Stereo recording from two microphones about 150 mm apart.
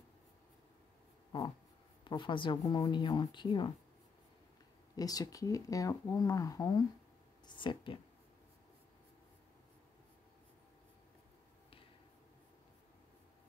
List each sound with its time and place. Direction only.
2.0 s speech: 35° left (ahead or behind)
4.9 s speech: 25° left (ahead or behind)